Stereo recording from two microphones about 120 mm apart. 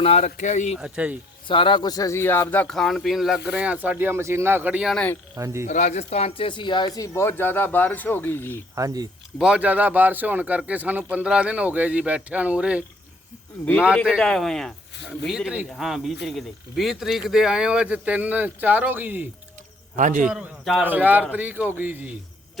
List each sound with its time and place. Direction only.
0.0 s speech: 60° left (ahead or behind); by 0.8 s 90° left
0.8 s a man's voice: 10° right (ahead or behind)
1.5 s speech: 45° left (ahead or behind); by 2.7 s 15° left (ahead or behind)
2.7 s a man's voice: centre (ahead or behind); by 5.6 s 25° right (ahead or behind)
5.6 s speech: 90° left; by 8.5 s 15° left (ahead or behind)
8.7 s speech: 30° right (ahead or behind)
9.4 s a man's voice: 10° right (ahead or behind)
14.0 s a man's voice: centre (ahead or behind); by 19.3 s 15° right (ahead or behind)
20.0 s a man's voice: 90° right
20.3 s a man's voice: 5° right (ahead or behind)